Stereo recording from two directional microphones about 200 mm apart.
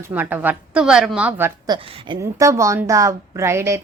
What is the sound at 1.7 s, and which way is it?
A woman's voice, 25° right (ahead or behind).